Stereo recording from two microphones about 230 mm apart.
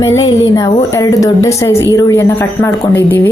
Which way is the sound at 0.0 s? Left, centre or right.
Centre.